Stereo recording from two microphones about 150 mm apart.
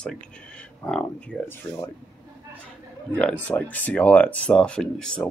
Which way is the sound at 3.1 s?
5° left (ahead or behind).